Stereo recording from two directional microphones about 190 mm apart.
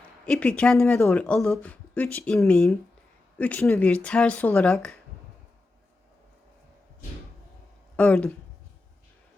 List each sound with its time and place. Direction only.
0.3 s speech: 5° left (ahead or behind)
7.9 s speech: 5° left (ahead or behind)